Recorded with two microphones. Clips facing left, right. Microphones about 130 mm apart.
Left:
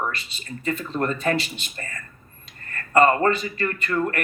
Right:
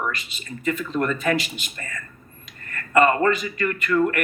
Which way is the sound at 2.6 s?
35° left (ahead or behind).